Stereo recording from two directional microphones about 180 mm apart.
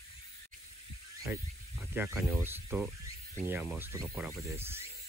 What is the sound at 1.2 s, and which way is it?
Speech, 10° right (ahead or behind).